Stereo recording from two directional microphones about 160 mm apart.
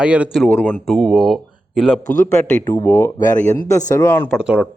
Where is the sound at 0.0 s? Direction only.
5° right (ahead or behind).